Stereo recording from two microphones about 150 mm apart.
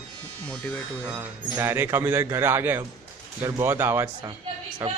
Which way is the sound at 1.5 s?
15° right (ahead or behind).